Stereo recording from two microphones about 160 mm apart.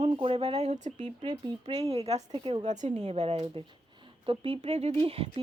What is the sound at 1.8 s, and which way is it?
Speech, 40° right (ahead or behind).